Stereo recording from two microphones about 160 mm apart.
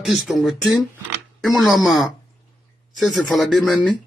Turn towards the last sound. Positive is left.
turn(degrees=0)  # may be behind; listen again after turning